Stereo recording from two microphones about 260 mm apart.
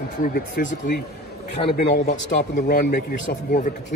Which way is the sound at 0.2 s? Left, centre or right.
Left.